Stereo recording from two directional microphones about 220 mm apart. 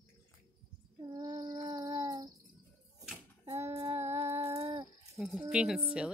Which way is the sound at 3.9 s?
30° right (ahead or behind).